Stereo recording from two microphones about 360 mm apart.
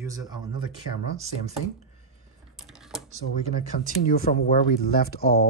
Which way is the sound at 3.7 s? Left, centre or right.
Left.